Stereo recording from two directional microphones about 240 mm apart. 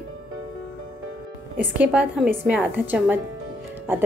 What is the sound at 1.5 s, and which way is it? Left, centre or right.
A woman's voice, centre.